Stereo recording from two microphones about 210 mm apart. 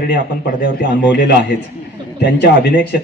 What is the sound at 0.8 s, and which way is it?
Speech, 55° left (ahead or behind).